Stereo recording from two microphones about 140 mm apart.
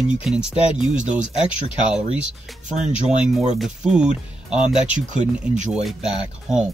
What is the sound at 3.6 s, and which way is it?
Speech, 5° right (ahead or behind).